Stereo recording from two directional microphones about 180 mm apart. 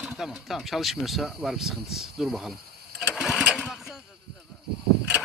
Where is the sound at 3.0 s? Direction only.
Centre (ahead or behind).